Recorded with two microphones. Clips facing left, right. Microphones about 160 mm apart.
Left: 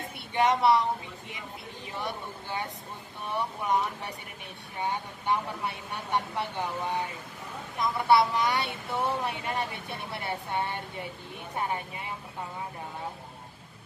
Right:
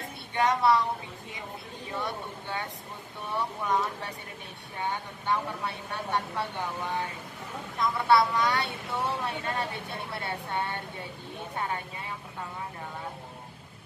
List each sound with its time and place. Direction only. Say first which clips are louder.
0.3 s speech: left 1 dB; 20° left (ahead or behind)
2.0 s speech: right 1 dB; 20° left (ahead or behind)
5.2 s speech: even; 20° left (ahead or behind)